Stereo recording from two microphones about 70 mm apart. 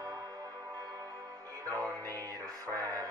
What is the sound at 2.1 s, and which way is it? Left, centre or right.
Music, right.